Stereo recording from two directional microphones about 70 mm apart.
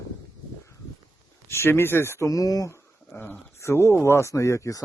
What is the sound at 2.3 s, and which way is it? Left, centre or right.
Speech, left.